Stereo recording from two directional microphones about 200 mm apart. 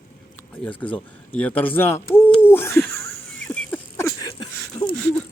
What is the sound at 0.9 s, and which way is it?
Bird, 5° left (ahead or behind).